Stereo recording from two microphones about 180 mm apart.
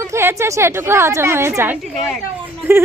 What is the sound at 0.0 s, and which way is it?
A woman's voice, 15° right (ahead or behind).